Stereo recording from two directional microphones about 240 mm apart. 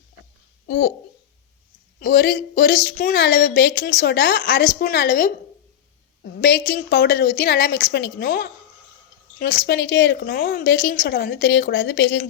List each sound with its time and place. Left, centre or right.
0.7 s a woman's voice: left
2.0 s speech: left
6.4 s a woman's voice: left